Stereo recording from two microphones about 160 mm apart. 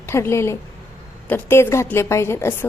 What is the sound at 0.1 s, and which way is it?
A woman's voice, 15° left (ahead or behind).